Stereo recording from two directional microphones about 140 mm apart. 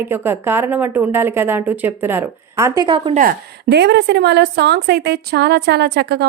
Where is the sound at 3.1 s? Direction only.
70° right (ahead or behind).